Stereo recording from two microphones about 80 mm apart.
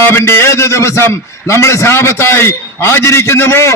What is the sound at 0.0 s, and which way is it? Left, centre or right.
A man's voice, left.